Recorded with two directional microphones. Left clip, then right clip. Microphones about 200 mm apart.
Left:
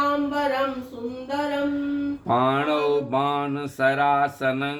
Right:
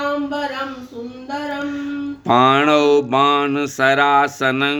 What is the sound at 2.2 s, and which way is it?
Mantra, 35° right (ahead or behind).